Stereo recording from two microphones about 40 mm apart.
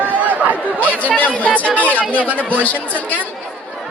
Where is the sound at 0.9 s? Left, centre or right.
Left.